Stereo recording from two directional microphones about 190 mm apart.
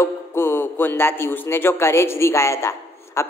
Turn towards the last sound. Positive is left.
turn(degrees=15)  # may be behind; listen again after turning